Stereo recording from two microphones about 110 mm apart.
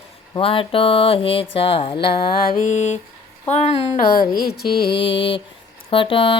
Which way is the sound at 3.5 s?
80° left.